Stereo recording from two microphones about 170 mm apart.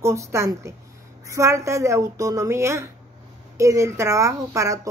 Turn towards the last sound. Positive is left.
turn(degrees=-20)  # may be behind; listen again after turning